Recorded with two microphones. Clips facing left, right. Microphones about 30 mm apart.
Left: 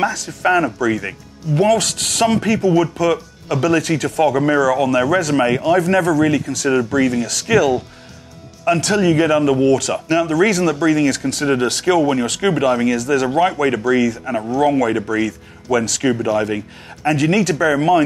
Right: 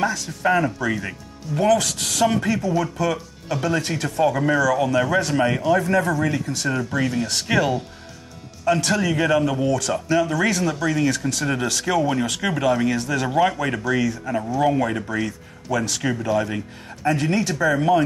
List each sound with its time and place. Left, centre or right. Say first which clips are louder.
0.0 s speech: left 4 dB; left
1.5 s speech: left 4 dB; left
3.6 s speech: left 7 dB; left
6.9 s speech: left 6 dB; left
8.6 s speech: left 5 dB; left
14.5 s speech: left 5 dB; left
17.0 s speech: left 5 dB; left